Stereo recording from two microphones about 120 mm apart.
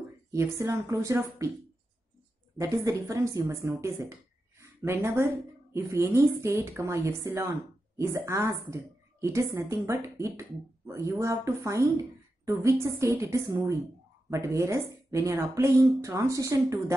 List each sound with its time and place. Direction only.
0.3 s speech: 25° right (ahead or behind)
2.5 s a woman's voice: 25° right (ahead or behind)